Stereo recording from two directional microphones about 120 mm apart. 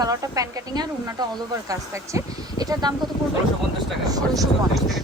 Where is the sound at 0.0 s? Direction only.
30° right (ahead or behind).